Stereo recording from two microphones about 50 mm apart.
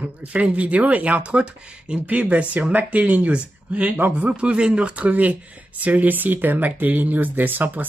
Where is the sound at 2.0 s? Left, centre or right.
Right.